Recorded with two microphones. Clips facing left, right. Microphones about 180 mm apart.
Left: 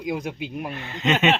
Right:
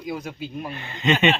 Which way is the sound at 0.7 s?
Centre (ahead or behind).